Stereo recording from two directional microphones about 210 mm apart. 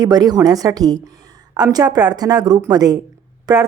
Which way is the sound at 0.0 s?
20° right (ahead or behind).